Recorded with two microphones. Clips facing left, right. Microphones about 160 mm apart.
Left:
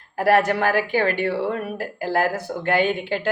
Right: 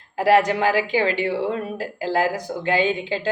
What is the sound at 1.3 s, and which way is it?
A woman's voice, 15° right (ahead or behind).